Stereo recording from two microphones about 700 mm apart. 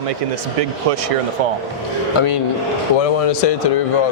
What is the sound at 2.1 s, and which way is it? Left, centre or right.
A man's voice, left.